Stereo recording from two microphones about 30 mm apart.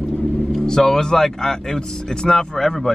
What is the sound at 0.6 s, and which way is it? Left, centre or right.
Speech, centre.